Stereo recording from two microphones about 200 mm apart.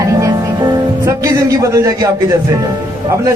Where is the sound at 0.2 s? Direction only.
15° right (ahead or behind).